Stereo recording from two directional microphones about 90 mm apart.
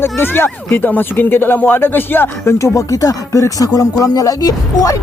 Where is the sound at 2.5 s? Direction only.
35° left (ahead or behind).